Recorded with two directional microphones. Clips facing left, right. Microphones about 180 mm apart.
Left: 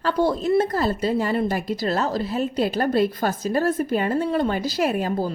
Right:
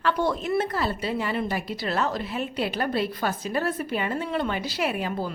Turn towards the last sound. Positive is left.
turn(degrees=40)  # may be behind; listen again after turning